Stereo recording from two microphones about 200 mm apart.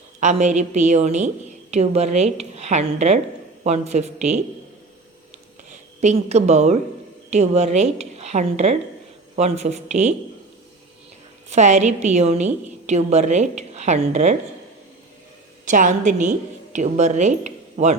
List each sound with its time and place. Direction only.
0.2 s a woman's voice: 35° right (ahead or behind)
6.0 s a woman's voice: 35° right (ahead or behind)
11.4 s a woman's voice: 35° right (ahead or behind)
15.6 s a woman's voice: 40° right (ahead or behind)